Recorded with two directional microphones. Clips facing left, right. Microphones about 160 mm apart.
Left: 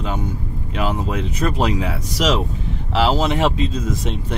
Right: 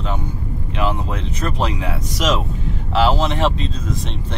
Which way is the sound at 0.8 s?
10° left (ahead or behind).